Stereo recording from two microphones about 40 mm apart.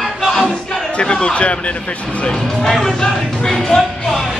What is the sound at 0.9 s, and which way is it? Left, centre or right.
Speech, left.